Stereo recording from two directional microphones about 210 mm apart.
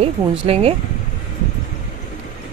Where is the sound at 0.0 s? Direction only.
30° right (ahead or behind).